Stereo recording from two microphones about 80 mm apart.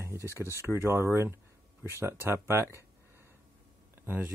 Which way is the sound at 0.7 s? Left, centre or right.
Right.